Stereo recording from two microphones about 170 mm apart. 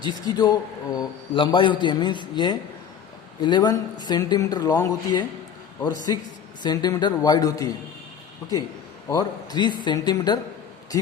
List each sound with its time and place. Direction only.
0.0 s speech: 25° left (ahead or behind)
6.6 s speech: 25° left (ahead or behind)
9.0 s speech: 20° left (ahead or behind)